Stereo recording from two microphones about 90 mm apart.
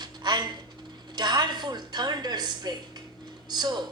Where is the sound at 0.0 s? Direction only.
55° right (ahead or behind).